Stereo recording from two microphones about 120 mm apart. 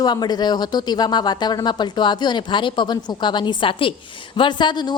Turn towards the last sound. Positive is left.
turn(degrees=40)  # may be behind; listen again after turning